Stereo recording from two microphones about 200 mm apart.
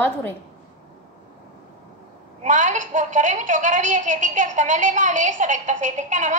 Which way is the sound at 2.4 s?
40° right (ahead or behind).